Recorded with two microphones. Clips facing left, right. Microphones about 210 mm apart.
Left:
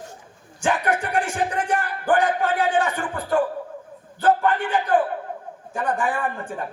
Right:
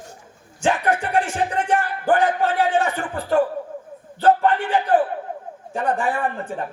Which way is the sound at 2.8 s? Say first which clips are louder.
Right 1 dB; 30° right (ahead or behind).